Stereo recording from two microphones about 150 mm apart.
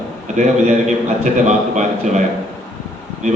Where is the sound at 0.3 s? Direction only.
55° right (ahead or behind).